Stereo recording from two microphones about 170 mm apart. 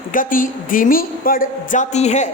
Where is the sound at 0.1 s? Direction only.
50° left (ahead or behind).